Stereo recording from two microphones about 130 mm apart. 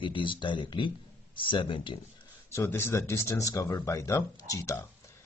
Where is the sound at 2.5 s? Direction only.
20° left (ahead or behind).